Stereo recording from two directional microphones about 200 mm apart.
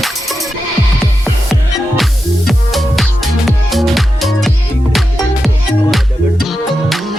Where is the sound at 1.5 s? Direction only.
Centre (ahead or behind).